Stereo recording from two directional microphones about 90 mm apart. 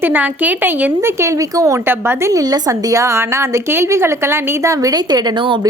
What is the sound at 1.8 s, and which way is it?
A woman's voice, 25° right (ahead or behind).